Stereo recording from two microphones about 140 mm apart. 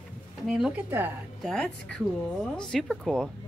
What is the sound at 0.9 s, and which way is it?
Speech, 15° right (ahead or behind).